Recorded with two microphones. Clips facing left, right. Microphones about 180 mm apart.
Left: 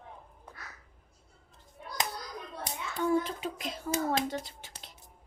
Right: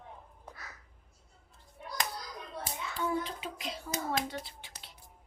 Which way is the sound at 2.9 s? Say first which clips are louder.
Left 6 dB; 45° left (ahead or behind).